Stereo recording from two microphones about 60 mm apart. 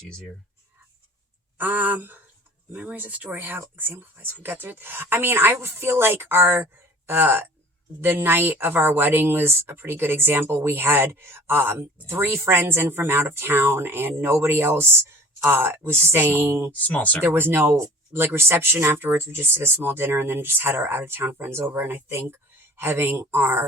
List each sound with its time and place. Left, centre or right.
1.5 s a woman's voice: right
16.8 s speech: left
17.2 s a woman's voice: right